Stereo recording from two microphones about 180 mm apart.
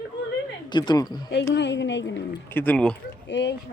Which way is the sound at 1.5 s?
75° left (ahead or behind).